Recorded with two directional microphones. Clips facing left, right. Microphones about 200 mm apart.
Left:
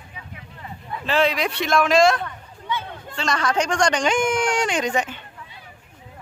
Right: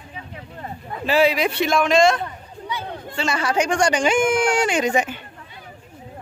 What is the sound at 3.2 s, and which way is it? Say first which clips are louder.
Speech: right 1 dB; 5° right (ahead or behind).